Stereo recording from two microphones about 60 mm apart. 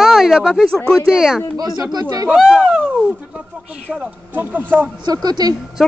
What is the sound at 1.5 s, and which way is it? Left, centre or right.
Speech, right.